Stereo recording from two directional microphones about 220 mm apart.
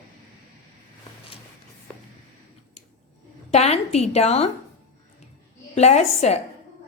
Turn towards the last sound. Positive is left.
turn(degrees=30)  # may be behind; listen again after turning